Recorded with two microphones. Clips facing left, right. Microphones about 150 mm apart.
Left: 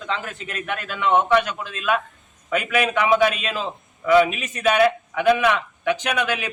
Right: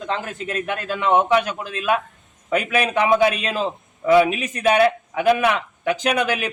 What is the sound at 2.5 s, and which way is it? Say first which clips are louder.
Speech: right 1 dB; 35° right (ahead or behind).